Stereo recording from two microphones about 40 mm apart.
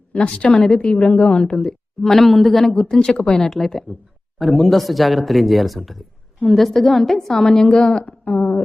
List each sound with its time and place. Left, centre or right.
0.1 s a woman's voice: left
2.0 s a woman's voice: centre
3.6 s a woman's voice: centre
7.9 s a woman's voice: left